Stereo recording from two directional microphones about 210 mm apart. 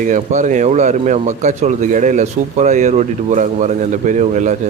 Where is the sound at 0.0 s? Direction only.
35° right (ahead or behind).